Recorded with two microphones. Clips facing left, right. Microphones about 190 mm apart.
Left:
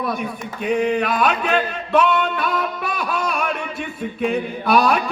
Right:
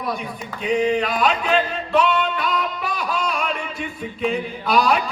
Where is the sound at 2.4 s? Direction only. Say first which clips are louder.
Left 1 dB; 55° left (ahead or behind).